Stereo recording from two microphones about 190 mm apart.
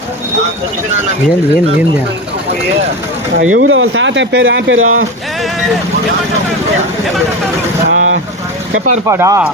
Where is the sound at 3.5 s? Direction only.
90° right.